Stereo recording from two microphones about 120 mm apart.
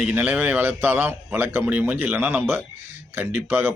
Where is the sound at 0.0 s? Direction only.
10° right (ahead or behind).